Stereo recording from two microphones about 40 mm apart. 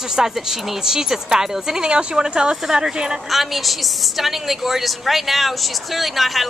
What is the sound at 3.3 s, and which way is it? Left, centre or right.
A woman's voice, centre.